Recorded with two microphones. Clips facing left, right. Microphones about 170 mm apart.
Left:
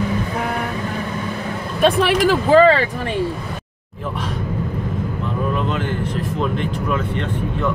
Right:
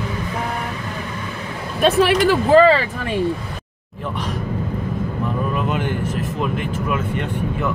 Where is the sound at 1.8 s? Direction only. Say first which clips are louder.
Even; centre (ahead or behind).